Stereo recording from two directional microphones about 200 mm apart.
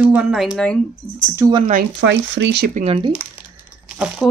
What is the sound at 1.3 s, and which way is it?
Speech, 15° right (ahead or behind).